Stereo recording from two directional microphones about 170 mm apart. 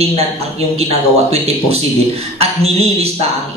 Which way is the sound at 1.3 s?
35° right (ahead or behind).